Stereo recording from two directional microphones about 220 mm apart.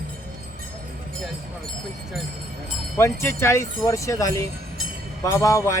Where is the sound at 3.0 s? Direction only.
10° left (ahead or behind).